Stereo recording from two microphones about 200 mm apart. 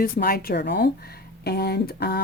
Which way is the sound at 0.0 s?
45° left (ahead or behind).